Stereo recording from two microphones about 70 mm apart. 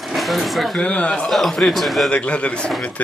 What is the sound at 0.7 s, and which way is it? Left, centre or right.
Speech, centre.